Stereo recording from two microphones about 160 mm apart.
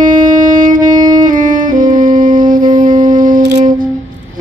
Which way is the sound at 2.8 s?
55° right (ahead or behind).